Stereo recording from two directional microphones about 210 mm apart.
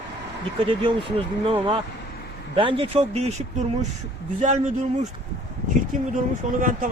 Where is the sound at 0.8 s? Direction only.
25° right (ahead or behind).